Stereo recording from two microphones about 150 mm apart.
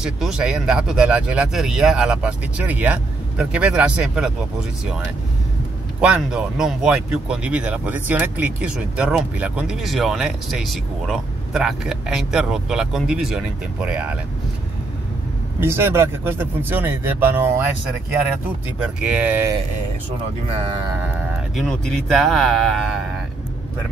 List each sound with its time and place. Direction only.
0.0 s speech: 5° right (ahead or behind)
5.9 s speech: 5° right (ahead or behind)
15.6 s speech: 15° right (ahead or behind)
18.9 s speech: 10° right (ahead or behind)
20.5 s speech: 40° right (ahead or behind)
21.5 s speech: 5° left (ahead or behind)